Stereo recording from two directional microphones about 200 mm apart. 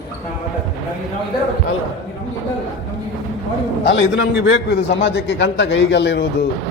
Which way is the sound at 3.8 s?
60° left (ahead or behind).